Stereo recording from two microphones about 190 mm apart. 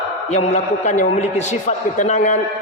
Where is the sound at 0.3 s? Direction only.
35° left (ahead or behind).